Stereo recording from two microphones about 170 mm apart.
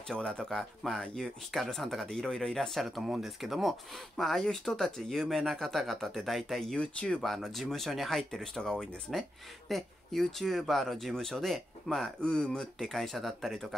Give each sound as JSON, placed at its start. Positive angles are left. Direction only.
{"t": 0.1, "sound": "speech", "side_deg": 5}